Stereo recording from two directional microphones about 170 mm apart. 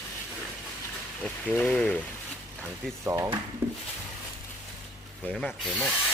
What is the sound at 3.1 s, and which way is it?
Speech, 20° right (ahead or behind).